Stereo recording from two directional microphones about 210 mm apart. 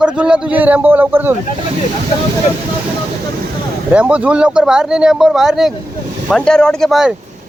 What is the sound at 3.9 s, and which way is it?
Speech, 5° right (ahead or behind).